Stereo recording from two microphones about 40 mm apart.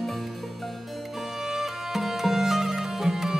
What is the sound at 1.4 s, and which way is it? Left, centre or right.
Music, centre.